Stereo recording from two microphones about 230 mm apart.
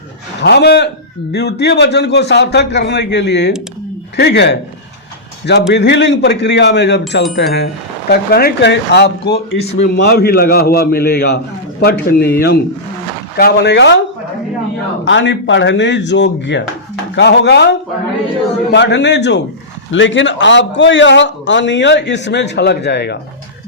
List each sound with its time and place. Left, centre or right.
0.4 s a man's voice: left
5.7 s a man's voice: left
9.6 s a man's voice: left
9.9 s a man's voice: left
15.0 s a man's voice: left